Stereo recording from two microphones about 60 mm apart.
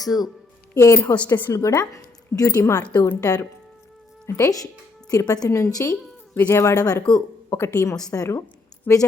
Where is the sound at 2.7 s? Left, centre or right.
Left.